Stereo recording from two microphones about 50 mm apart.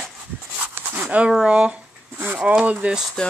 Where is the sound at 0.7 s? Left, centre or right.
Right.